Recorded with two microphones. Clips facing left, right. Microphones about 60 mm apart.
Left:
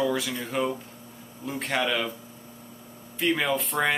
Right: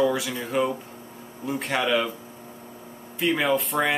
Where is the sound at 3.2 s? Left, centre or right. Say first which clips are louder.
Right 2 dB; centre.